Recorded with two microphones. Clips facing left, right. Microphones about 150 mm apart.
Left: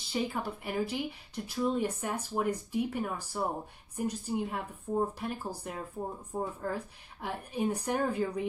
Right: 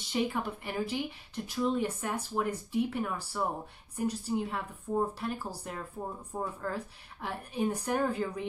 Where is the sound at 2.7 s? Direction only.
45° left (ahead or behind).